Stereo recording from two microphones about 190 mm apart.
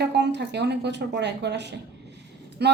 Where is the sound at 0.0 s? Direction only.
65° right (ahead or behind).